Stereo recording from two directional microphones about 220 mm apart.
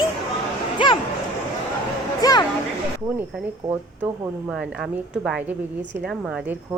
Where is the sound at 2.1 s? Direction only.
15° left (ahead or behind).